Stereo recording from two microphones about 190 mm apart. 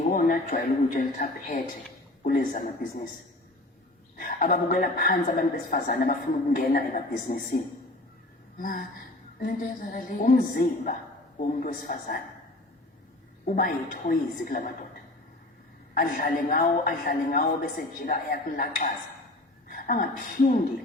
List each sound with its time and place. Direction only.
0.0 s a woman's voice: 50° left (ahead or behind)
4.2 s a woman's voice: 45° left (ahead or behind)
8.5 s a sound: 45° left (ahead or behind)
9.4 s a woman's voice: 45° left (ahead or behind)
13.6 s a woman's voice: 45° left (ahead or behind)
16.0 s a woman's voice: 50° left (ahead or behind)